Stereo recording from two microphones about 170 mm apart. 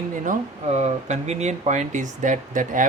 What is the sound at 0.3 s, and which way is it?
Speech, 40° right (ahead or behind).